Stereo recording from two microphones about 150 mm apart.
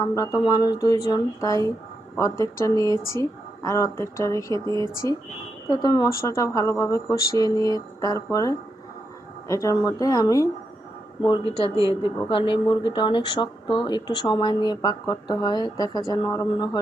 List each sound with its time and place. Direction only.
0.0 s speech: 20° left (ahead or behind)
11.2 s speech: 35° left (ahead or behind)